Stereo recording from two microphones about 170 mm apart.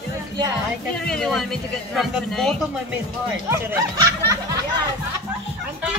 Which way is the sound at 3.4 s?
15° right (ahead or behind).